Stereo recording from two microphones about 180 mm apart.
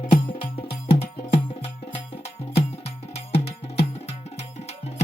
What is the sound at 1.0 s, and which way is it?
Music, 30° left (ahead or behind).